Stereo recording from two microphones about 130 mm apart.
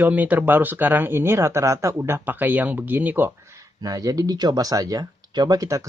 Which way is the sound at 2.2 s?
15° right (ahead or behind).